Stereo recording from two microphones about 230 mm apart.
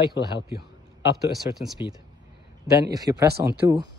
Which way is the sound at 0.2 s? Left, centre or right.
Left.